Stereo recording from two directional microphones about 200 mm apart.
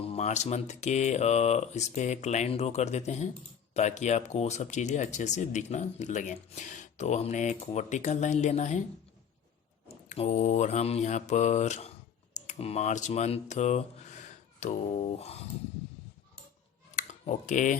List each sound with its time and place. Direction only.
0.1 s speech: 35° left (ahead or behind)
9.9 s speech: 35° left (ahead or behind)
16.9 s computer keyboard: 35° left (ahead or behind)